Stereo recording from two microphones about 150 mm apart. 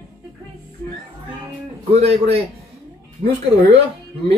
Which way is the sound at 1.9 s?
45° right (ahead or behind).